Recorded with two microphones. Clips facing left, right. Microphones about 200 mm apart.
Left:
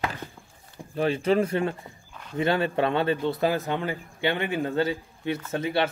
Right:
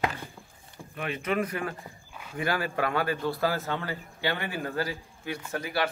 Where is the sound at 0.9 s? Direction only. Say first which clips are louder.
Left 7 dB; 30° left (ahead or behind).